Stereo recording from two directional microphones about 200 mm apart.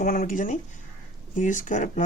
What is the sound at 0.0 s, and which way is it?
Speech, 45° left (ahead or behind).